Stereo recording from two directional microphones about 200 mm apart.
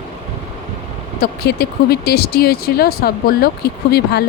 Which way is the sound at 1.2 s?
55° left (ahead or behind).